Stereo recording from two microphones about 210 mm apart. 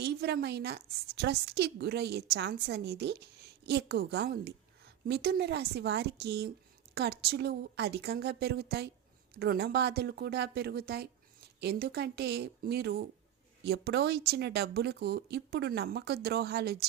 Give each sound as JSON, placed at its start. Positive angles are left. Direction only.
{"t": 0.0, "sound": "a woman's voice", "side_deg": -50}